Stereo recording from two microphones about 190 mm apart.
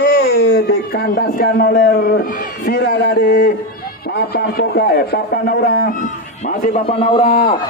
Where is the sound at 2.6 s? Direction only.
55° left (ahead or behind).